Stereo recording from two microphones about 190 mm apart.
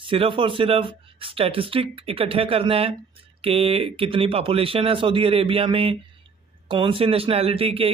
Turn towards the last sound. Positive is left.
turn(degrees=-30)  # may be behind; listen again after turning